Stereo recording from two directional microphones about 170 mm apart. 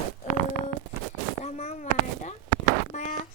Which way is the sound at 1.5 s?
40° left (ahead or behind).